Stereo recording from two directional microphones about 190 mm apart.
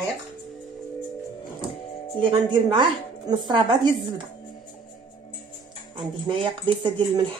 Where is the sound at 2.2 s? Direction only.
25° right (ahead or behind).